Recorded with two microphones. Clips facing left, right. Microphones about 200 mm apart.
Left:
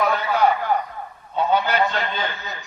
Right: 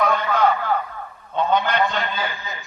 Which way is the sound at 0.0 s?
10° left (ahead or behind).